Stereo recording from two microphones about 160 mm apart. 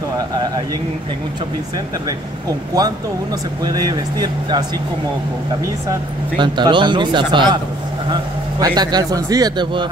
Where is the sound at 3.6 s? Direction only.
25° right (ahead or behind).